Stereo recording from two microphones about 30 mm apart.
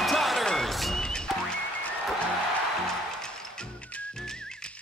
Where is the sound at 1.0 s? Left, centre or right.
Left.